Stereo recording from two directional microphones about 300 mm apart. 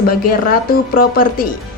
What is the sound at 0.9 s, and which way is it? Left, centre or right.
Speech, left.